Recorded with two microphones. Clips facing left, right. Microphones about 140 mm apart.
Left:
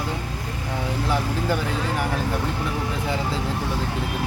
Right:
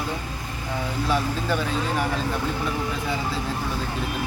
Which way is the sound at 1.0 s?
20° left (ahead or behind).